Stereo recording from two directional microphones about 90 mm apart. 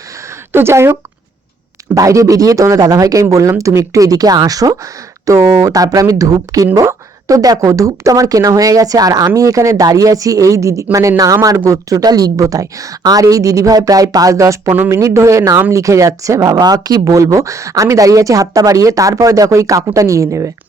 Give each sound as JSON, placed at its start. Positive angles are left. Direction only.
{"t": 0.5, "sound": "speech", "side_deg": -30}
{"t": 2.0, "sound": "speech", "side_deg": -35}